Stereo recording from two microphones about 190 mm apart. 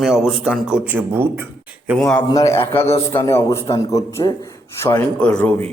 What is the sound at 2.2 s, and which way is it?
A man's voice, 20° left (ahead or behind).